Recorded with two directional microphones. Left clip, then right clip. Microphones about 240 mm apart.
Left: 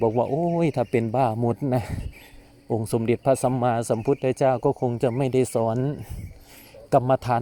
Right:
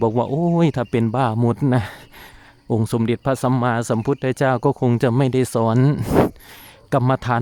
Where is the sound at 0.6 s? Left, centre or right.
Centre.